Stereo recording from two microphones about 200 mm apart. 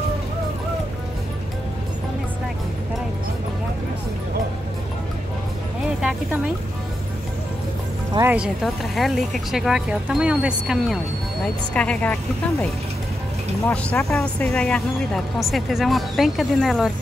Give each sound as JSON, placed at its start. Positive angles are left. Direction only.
{"t": 5.9, "sound": "music", "side_deg": -5}
{"t": 8.1, "sound": "speech", "side_deg": -10}
{"t": 8.9, "sound": "speech", "side_deg": 0}
{"t": 13.7, "sound": "speech", "side_deg": 10}